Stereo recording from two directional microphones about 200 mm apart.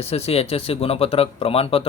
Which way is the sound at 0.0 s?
30° left (ahead or behind).